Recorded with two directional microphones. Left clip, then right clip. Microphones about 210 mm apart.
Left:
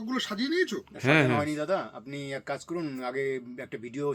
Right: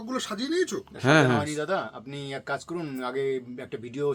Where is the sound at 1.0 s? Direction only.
10° right (ahead or behind).